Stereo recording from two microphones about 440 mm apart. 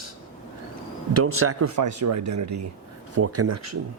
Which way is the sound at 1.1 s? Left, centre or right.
Right.